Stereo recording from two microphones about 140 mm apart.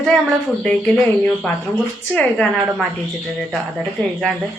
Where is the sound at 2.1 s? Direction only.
5° left (ahead or behind).